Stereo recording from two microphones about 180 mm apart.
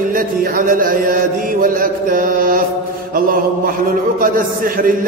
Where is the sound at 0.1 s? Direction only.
50° right (ahead or behind).